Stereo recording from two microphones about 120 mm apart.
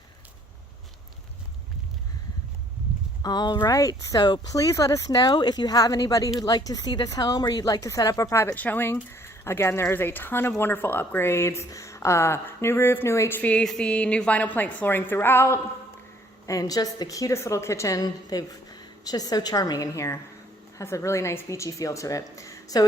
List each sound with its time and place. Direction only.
3.2 s a woman's voice: 35° left (ahead or behind)
8.5 s speech: 15° left (ahead or behind)
16.5 s a woman's voice: 30° left (ahead or behind)